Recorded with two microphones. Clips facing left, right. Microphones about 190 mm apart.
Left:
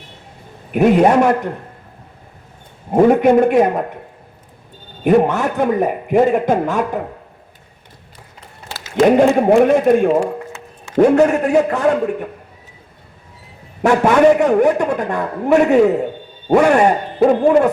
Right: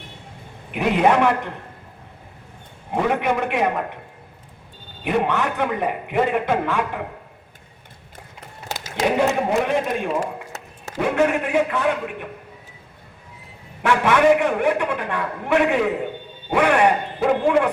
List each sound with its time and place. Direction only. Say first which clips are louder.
0.7 s a man's voice: left 6 dB; 40° left (ahead or behind)
2.9 s a man's voice: left 10 dB; 40° left (ahead or behind)
5.0 s a man's voice: left 8 dB; 40° left (ahead or behind)
9.0 s a man's voice: left 8 dB; 50° left (ahead or behind)
13.8 s a man's voice: left 5 dB; 40° left (ahead or behind)